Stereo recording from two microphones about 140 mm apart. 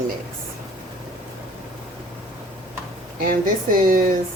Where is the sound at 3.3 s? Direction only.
75° right (ahead or behind).